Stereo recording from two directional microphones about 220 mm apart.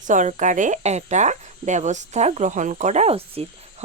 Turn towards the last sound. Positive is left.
turn(degrees=-25)  # may be behind; listen again after turning